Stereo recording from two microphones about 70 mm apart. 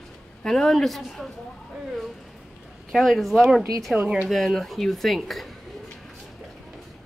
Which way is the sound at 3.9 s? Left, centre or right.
Centre.